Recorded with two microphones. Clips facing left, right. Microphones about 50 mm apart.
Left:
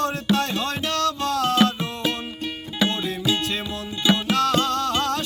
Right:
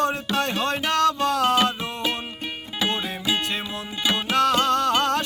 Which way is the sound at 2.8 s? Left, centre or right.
Right.